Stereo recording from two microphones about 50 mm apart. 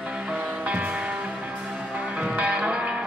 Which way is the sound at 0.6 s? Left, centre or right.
Right.